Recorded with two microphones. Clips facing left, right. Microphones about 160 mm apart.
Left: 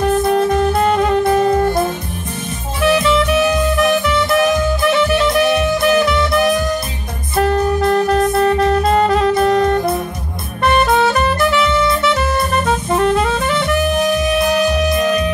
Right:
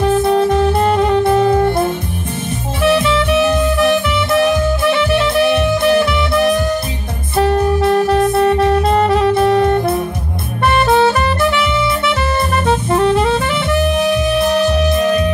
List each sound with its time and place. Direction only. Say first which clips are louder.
2.9 s music: even; 25° right (ahead or behind)
8.1 s music: right 1 dB; 25° right (ahead or behind)
8.8 s saxophone: even; centre (ahead or behind)
12.9 s music: right 1 dB; 5° right (ahead or behind)